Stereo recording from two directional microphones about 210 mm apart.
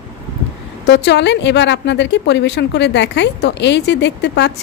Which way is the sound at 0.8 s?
55° left (ahead or behind).